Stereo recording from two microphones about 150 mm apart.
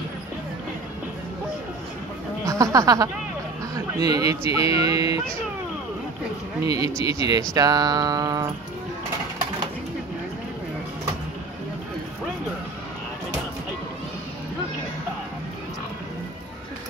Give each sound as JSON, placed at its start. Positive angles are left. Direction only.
{"t": 2.4, "sound": "speech", "side_deg": -20}
{"t": 6.6, "sound": "speech", "side_deg": -25}